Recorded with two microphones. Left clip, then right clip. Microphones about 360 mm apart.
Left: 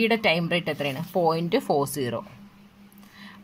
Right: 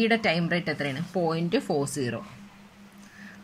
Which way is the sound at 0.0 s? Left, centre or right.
Centre.